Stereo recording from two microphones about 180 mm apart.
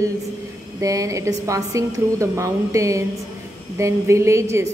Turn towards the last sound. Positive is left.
turn(degrees=-15)  # may be behind; listen again after turning